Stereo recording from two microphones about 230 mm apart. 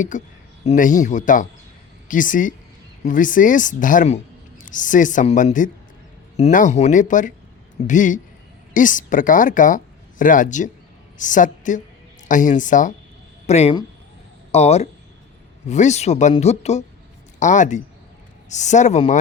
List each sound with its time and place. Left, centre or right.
0.1 s a woman's voice: left